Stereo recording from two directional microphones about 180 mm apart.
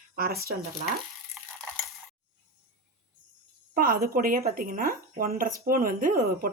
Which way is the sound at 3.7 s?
50° right (ahead or behind).